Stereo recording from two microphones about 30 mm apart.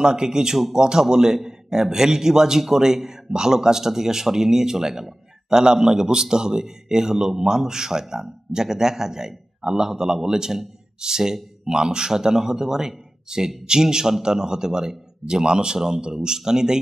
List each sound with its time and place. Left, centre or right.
0.0 s a man's voice: right